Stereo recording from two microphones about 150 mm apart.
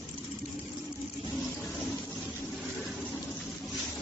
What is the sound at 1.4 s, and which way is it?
Toilet flush, centre (ahead or behind).